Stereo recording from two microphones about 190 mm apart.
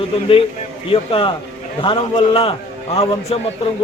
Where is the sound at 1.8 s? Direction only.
25° left (ahead or behind).